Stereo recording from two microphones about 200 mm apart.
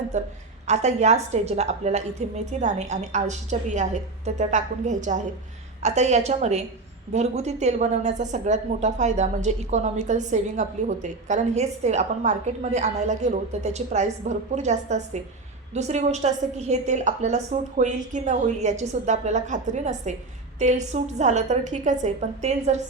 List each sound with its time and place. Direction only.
0.1 s a woman's voice: 35° right (ahead or behind)